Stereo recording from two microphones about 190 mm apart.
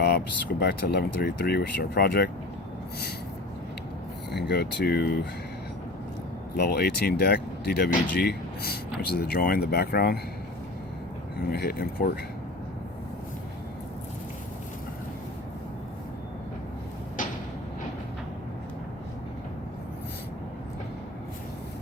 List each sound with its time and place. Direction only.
0.6 s speech: 55° left (ahead or behind)
4.3 s speech: 60° left (ahead or behind)
6.6 s speech: 55° left (ahead or behind)
11.5 s speech: 55° left (ahead or behind)
17.2 s a sound: 45° left (ahead or behind)